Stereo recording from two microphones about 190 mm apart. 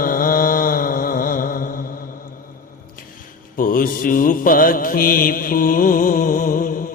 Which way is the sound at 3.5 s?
50° left (ahead or behind).